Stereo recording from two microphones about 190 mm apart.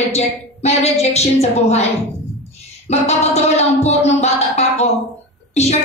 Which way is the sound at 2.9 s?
35° left (ahead or behind).